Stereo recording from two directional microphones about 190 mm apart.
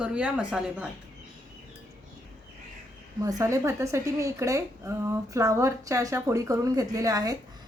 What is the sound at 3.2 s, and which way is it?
A woman's voice, 15° right (ahead or behind).